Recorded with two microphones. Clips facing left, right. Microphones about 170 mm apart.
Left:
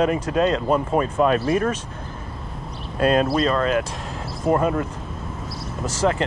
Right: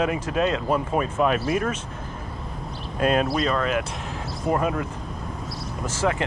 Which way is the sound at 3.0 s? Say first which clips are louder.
Left 3 dB; 35° left (ahead or behind).